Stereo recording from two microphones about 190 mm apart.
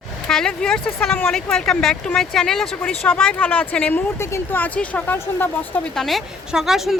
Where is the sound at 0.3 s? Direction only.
5° left (ahead or behind).